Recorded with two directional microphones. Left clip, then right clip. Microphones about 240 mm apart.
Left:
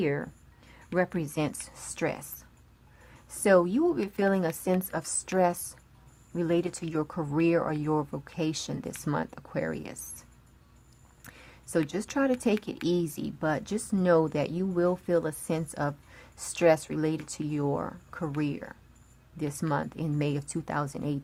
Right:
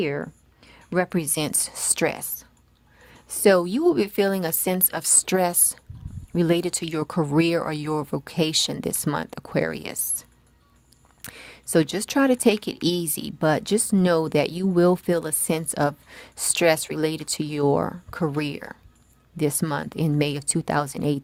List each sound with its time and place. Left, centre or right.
0.0 s speech: right
11.3 s speech: right